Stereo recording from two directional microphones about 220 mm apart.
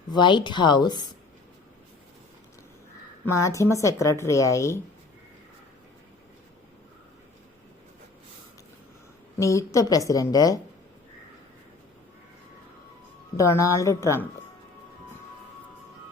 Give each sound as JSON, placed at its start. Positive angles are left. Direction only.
{"t": 0.1, "sound": "speech", "side_deg": 20}
{"t": 3.3, "sound": "a woman's voice", "side_deg": 15}
{"t": 9.4, "sound": "a woman's voice", "side_deg": 15}
{"t": 13.3, "sound": "a woman's voice", "side_deg": 15}